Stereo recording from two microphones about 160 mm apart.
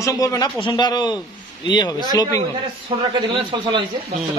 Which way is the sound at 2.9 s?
25° right (ahead or behind).